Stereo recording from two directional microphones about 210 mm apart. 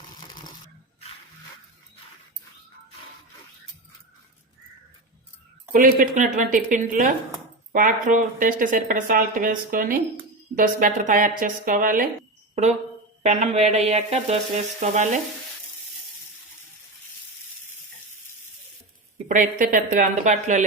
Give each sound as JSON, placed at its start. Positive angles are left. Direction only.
{"t": 5.7, "sound": "speech", "side_deg": -40}
{"t": 13.2, "sound": "speech", "side_deg": -35}
{"t": 19.3, "sound": "speech", "side_deg": -40}